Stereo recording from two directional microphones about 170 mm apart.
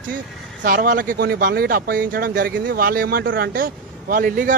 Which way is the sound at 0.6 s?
55° right (ahead or behind).